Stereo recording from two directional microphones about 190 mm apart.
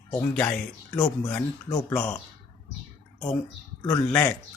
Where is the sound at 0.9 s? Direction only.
20° left (ahead or behind).